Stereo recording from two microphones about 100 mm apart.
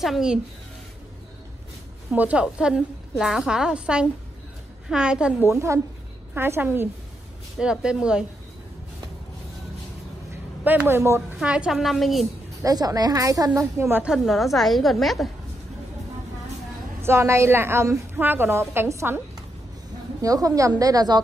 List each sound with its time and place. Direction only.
0.0 s a woman's voice: 5° right (ahead or behind)
2.0 s a woman's voice: 15° right (ahead or behind)
5.4 s a woman's voice: 30° right (ahead or behind)
7.5 s a woman's voice: 10° right (ahead or behind)
10.6 s a woman's voice: 20° right (ahead or behind)
11.3 s a woman's voice: 10° right (ahead or behind)
12.6 s a woman's voice: 40° right (ahead or behind)
14.0 s a woman's voice: 5° right (ahead or behind)
17.0 s a woman's voice: 25° right (ahead or behind)
20.2 s a woman's voice: 35° right (ahead or behind)